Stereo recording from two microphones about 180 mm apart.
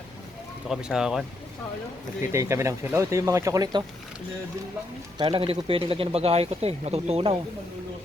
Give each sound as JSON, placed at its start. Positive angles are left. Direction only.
{"t": 0.7, "sound": "speech", "side_deg": -5}
{"t": 2.3, "sound": "speech", "side_deg": -15}
{"t": 5.1, "sound": "speech", "side_deg": -25}